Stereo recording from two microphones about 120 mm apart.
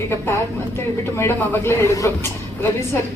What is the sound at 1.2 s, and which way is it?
A woman's voice, 20° left (ahead or behind).